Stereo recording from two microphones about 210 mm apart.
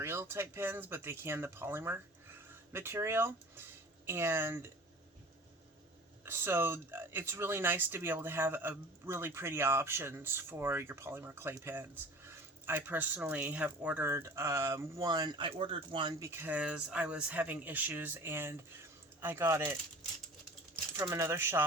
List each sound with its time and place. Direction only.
0.0 s speech: 10° right (ahead or behind)
6.2 s speech: 10° right (ahead or behind)
20.9 s speech: 15° right (ahead or behind)